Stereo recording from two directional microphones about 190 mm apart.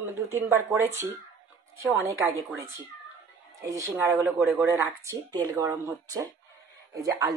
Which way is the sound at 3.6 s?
15° right (ahead or behind).